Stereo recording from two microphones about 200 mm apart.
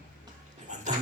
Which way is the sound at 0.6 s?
35° right (ahead or behind).